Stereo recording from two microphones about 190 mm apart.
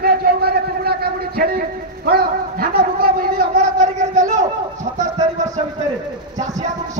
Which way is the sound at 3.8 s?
40° right (ahead or behind).